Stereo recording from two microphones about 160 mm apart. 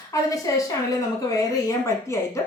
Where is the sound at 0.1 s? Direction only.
20° left (ahead or behind).